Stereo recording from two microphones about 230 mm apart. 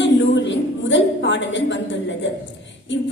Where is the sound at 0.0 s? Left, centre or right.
Left.